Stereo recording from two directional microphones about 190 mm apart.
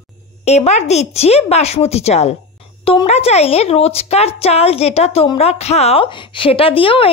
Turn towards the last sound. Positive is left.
turn(degrees=30)  # may be behind; listen again after turning